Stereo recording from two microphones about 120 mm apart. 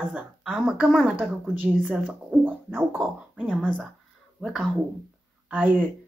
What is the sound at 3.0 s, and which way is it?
Speech, centre (ahead or behind).